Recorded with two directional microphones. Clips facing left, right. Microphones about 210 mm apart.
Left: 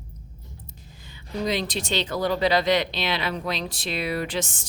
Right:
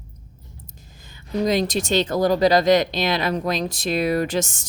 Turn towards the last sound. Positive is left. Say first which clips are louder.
# right 6 dB
turn(degrees=-45)  # may be behind; listen again after turning